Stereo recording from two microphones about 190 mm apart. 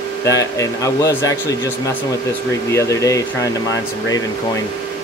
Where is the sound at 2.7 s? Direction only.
15° left (ahead or behind).